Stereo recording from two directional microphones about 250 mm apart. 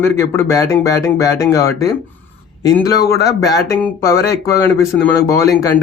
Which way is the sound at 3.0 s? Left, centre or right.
Left.